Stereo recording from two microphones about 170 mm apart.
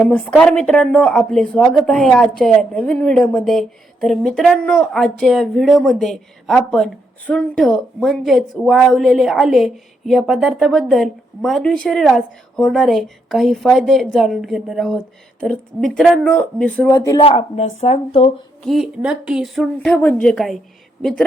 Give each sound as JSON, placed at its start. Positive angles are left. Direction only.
{"t": 0.0, "sound": "a woman's voice", "side_deg": 5}
{"t": 16.9, "sound": "speech", "side_deg": 20}
{"t": 17.2, "sound": "speech", "side_deg": 35}
{"t": 18.6, "sound": "a woman's voice", "side_deg": 0}